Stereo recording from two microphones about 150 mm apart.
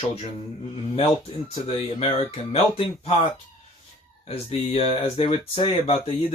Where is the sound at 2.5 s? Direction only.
40° left (ahead or behind).